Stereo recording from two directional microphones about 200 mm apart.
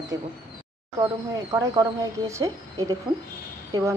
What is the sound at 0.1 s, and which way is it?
Speech, 15° right (ahead or behind).